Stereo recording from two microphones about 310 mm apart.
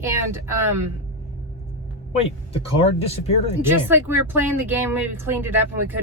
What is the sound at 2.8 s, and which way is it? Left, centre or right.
Speech, centre.